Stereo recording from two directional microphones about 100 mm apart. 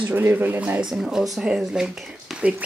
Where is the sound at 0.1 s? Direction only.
20° right (ahead or behind).